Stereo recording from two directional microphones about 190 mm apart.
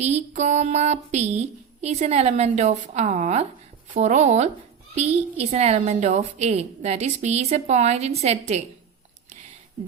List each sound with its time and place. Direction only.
0.0 s a woman's voice: 35° right (ahead or behind)